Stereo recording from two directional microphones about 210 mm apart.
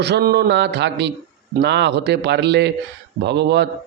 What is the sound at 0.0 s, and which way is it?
A man's voice, 50° right (ahead or behind).